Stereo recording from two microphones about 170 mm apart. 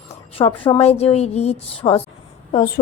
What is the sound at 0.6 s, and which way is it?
A woman's voice, 35° left (ahead or behind).